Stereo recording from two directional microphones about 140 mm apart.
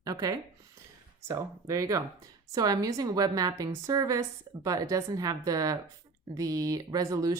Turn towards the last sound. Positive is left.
turn(degrees=-25)  # may be behind; listen again after turning